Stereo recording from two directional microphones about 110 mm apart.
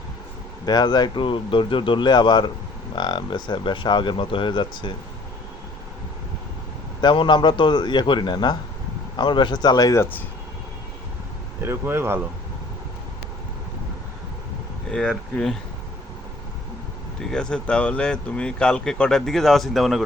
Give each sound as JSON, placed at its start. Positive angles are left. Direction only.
{"t": 0.6, "sound": "speech", "side_deg": 40}
{"t": 7.0, "sound": "speech", "side_deg": 45}
{"t": 11.6, "sound": "speech", "side_deg": -20}
{"t": 14.8, "sound": "speech", "side_deg": 5}
{"t": 17.2, "sound": "speech", "side_deg": 5}